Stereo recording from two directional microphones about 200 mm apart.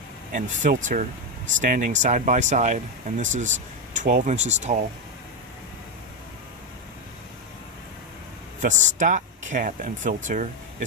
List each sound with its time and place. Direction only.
0.3 s speech: 40° right (ahead or behind)
8.6 s speech: 40° right (ahead or behind)